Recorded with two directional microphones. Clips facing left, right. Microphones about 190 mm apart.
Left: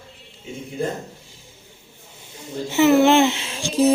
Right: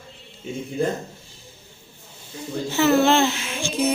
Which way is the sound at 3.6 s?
40° left (ahead or behind).